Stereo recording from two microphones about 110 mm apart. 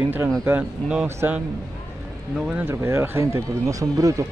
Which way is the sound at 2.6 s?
20° right (ahead or behind).